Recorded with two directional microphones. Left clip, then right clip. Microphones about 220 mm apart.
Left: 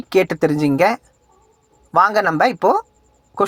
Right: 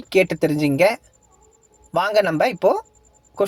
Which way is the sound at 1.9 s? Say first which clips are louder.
Left 4 dB; 25° left (ahead or behind).